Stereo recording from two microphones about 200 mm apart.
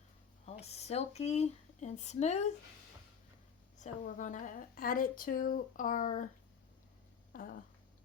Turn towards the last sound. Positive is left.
turn(degrees=45)  # may be behind; listen again after turning